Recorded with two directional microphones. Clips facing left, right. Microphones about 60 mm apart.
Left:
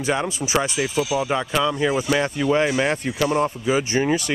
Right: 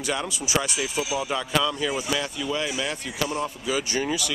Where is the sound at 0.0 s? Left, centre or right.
Left.